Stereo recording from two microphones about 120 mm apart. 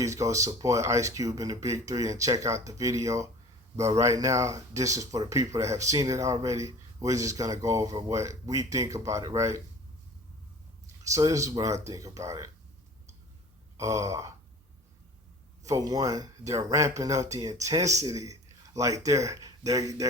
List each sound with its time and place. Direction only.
0.0 s speech: 25° right (ahead or behind)
11.0 s speech: 25° right (ahead or behind)
13.7 s speech: 25° right (ahead or behind)
15.6 s speech: 30° right (ahead or behind)